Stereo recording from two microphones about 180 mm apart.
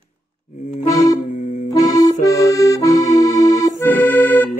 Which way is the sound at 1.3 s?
40° left (ahead or behind).